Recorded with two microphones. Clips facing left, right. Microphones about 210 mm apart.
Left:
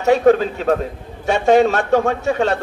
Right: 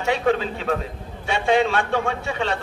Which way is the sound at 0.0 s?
45° left (ahead or behind).